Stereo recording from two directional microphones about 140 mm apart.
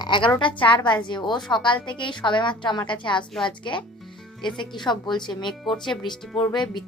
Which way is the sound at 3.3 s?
5° left (ahead or behind).